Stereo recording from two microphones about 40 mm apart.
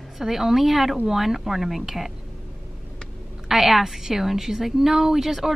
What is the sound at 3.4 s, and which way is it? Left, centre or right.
A woman's voice, centre.